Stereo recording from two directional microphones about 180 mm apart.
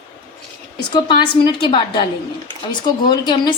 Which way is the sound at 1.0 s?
25° left (ahead or behind).